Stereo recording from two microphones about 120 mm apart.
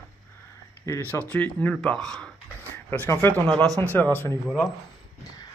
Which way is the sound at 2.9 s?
20° left (ahead or behind).